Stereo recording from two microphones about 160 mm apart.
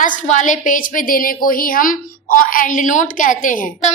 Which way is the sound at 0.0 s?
50° left (ahead or behind).